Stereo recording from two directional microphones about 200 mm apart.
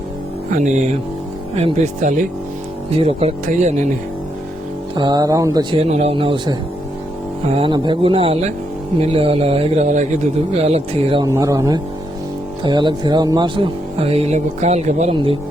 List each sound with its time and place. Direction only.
0.5 s speech: 35° right (ahead or behind)
4.9 s speech: 20° right (ahead or behind)
5.8 s speech: 30° right (ahead or behind)
11.3 s speech: 15° right (ahead or behind)